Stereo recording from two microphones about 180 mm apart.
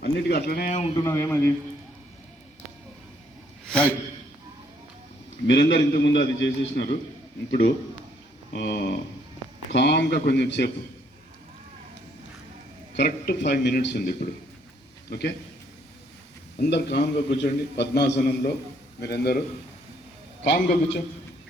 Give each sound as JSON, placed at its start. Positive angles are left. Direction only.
{"t": 0.0, "sound": "a man's voice", "side_deg": 60}
{"t": 0.9, "sound": "speech", "side_deg": 15}
{"t": 3.7, "sound": "a man's voice", "side_deg": 5}
{"t": 5.5, "sound": "a man's voice", "side_deg": 80}
{"t": 8.5, "sound": "a man's voice", "side_deg": 60}
{"t": 9.7, "sound": "a man's voice", "side_deg": 70}
{"t": 12.9, "sound": "a man's voice", "side_deg": 65}
{"t": 15.1, "sound": "a man's voice", "side_deg": 65}
{"t": 16.6, "sound": "a man's voice", "side_deg": 70}
{"t": 20.4, "sound": "a man's voice", "side_deg": 70}